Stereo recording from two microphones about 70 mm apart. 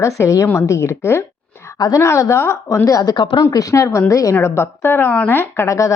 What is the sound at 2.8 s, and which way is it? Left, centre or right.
A woman's voice, left.